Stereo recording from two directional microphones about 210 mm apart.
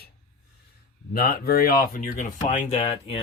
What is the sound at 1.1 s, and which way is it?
Speech, 45° left (ahead or behind).